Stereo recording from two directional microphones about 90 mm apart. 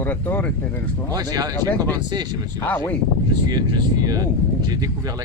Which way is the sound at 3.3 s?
50° right (ahead or behind).